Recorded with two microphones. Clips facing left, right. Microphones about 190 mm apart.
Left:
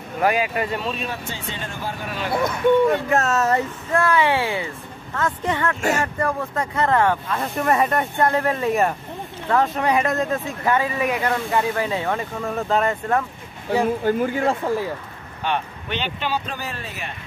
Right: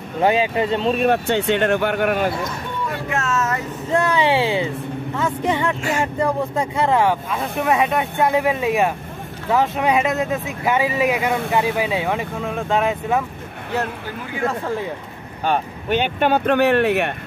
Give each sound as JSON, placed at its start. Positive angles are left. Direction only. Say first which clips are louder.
{"t": 0.2, "sound": "speech", "louder": "right 3 dB", "side_deg": -25}
{"t": 0.9, "sound": "speech", "louder": "right 12 dB", "side_deg": -65}
{"t": 3.1, "sound": "speech", "louder": "left 3 dB", "side_deg": 40}
{"t": 3.9, "sound": "speech", "louder": "right 2 dB", "side_deg": -20}
{"t": 14.0, "sound": "speech", "louder": "left 10 dB", "side_deg": 50}
{"t": 15.4, "sound": "speech", "louder": "right 4 dB", "side_deg": -45}